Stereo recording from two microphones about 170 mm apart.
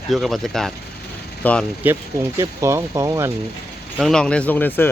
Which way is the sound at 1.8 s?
10° right (ahead or behind).